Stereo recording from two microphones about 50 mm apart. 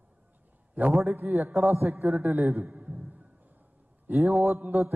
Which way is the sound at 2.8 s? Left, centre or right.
Right.